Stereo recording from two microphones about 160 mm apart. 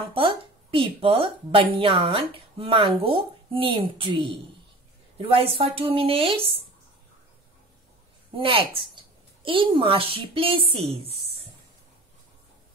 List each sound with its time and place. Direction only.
0.1 s speech: 35° right (ahead or behind)
8.4 s a woman's voice: 35° right (ahead or behind)